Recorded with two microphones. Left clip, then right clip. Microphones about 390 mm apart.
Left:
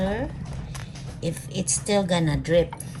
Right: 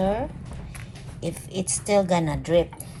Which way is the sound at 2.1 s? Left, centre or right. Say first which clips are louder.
Right 1 dB; centre.